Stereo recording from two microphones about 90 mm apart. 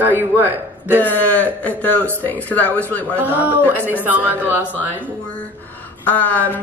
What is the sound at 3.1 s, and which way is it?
A man's voice, 20° right (ahead or behind).